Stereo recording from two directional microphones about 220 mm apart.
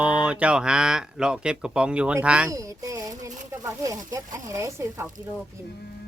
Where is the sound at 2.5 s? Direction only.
15° right (ahead or behind).